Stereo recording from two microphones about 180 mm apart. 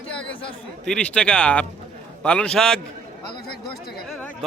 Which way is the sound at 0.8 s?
5° left (ahead or behind).